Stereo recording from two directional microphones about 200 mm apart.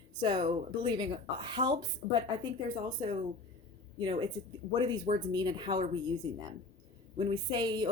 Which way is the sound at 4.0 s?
20° right (ahead or behind).